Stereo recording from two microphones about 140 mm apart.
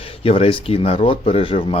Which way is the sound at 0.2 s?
45° left (ahead or behind).